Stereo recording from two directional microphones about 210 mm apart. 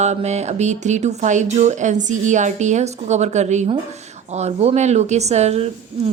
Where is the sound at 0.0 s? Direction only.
30° right (ahead or behind).